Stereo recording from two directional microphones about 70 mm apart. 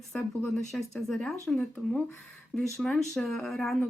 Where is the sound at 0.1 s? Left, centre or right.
Centre.